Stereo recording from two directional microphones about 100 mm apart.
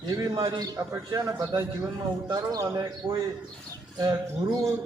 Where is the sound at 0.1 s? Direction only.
40° right (ahead or behind).